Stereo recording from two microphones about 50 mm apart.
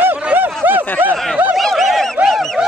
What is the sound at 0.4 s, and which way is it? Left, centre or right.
Snicker, right.